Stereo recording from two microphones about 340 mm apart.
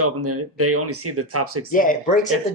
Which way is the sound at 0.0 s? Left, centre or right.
Right.